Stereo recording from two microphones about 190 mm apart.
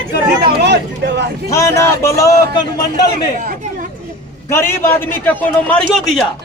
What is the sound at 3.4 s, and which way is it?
Chatter, 45° right (ahead or behind).